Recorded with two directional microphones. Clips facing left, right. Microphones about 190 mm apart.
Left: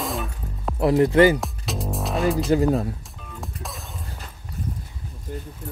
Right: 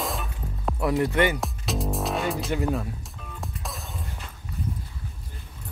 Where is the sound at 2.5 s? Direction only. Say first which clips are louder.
Left 7 dB; 35° left (ahead or behind).